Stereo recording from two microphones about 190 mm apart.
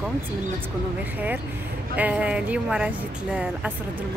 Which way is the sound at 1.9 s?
10° right (ahead or behind).